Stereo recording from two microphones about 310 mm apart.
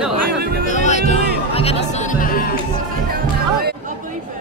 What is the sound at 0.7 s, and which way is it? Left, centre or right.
Music, left.